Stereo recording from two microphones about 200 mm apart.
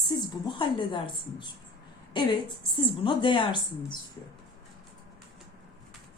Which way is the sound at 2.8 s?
25° left (ahead or behind).